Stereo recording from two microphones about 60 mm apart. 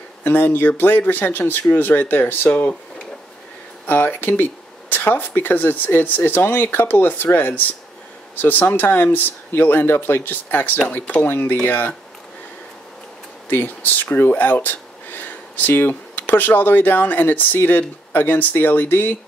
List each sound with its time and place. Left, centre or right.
0.2 s speech: left
3.8 s speech: left
13.5 s speech: left